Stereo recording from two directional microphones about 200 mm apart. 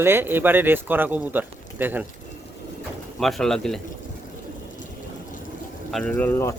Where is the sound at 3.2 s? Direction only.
Centre (ahead or behind).